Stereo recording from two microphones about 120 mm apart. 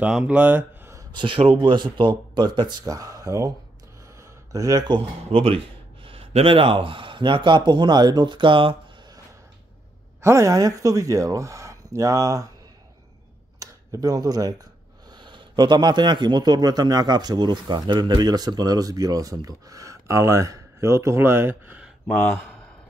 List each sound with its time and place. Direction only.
0.3 s speech: 15° right (ahead or behind)
1.1 s a man's voice: 45° right (ahead or behind)
10.2 s speech: 25° right (ahead or behind)
13.6 s a sound: 30° right (ahead or behind)
15.0 s a man's voice: 40° right (ahead or behind); by 21.9 s 10° right (ahead or behind)